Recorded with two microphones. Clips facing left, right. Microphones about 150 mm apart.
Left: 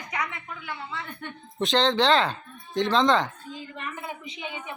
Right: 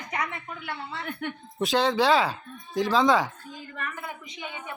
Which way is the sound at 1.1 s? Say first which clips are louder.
Right 6 dB; 75° right (ahead or behind).